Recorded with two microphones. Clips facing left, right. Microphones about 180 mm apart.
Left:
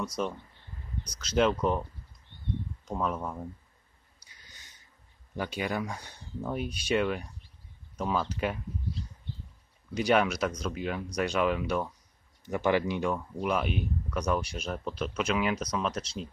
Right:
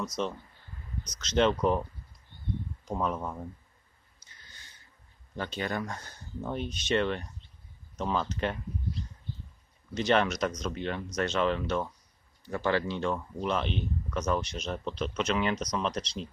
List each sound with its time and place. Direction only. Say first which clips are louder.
0.0 s speech: even; 10° left (ahead or behind)
4.3 s a sound: right 1 dB; 15° left (ahead or behind)
5.3 s speech: left 1 dB; 10° left (ahead or behind)
9.9 s speech: left 1 dB; 10° left (ahead or behind)